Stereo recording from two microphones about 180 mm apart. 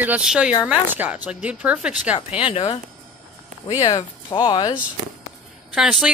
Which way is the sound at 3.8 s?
20° left (ahead or behind).